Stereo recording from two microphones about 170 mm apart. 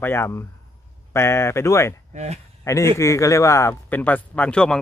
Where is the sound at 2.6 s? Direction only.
15° left (ahead or behind).